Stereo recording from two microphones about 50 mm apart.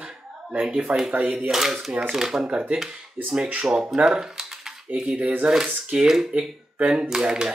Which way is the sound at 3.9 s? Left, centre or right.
Centre.